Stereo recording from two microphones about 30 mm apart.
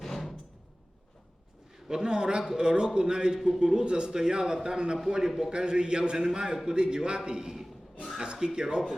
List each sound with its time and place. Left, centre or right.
1.9 s a man's voice: right